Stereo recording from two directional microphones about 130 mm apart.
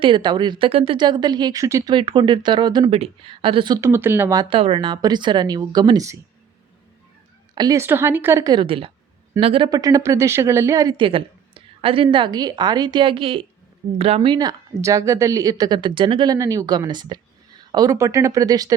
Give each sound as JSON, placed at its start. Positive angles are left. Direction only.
{"t": 0.0, "sound": "speech", "side_deg": -35}
{"t": 2.8, "sound": "speech", "side_deg": -50}
{"t": 3.8, "sound": "a woman's voice", "side_deg": -20}
{"t": 4.4, "sound": "speech", "side_deg": -45}
{"t": 7.5, "sound": "a woman's voice", "side_deg": -35}
{"t": 7.8, "sound": "speech", "side_deg": -20}
{"t": 8.4, "sound": "speech", "side_deg": -40}
{"t": 9.6, "sound": "a woman's voice", "side_deg": -30}
{"t": 10.9, "sound": "a sound", "side_deg": -45}
{"t": 12.1, "sound": "speech", "side_deg": -35}
{"t": 14.3, "sound": "a woman's voice", "side_deg": -25}